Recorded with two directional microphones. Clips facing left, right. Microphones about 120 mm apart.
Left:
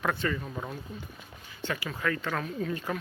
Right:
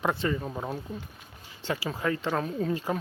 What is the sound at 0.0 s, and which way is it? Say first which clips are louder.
Speech: right 2 dB; 25° right (ahead or behind).